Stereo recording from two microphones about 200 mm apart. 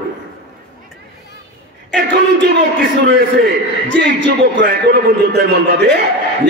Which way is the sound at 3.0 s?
55° right (ahead or behind).